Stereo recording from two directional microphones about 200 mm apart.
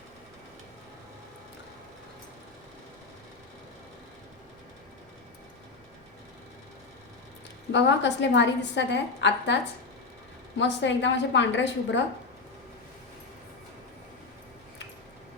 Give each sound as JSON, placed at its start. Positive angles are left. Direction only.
{"t": 7.7, "sound": "a woman's voice", "side_deg": 60}
{"t": 10.6, "sound": "a woman's voice", "side_deg": 60}